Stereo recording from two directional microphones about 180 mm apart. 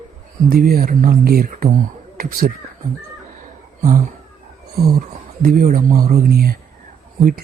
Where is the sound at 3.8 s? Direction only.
45° right (ahead or behind).